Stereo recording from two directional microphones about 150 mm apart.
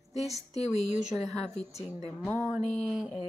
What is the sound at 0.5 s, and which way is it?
A woman's voice, 45° left (ahead or behind).